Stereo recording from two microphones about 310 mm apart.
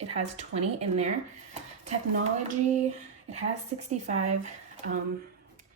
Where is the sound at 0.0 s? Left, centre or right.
Right.